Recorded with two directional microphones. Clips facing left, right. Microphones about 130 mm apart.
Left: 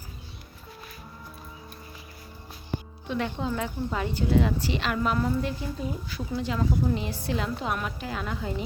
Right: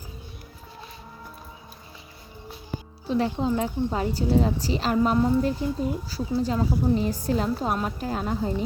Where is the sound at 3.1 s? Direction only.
35° right (ahead or behind).